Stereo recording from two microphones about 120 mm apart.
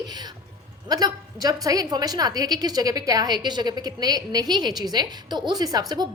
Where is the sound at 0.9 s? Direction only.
35° right (ahead or behind).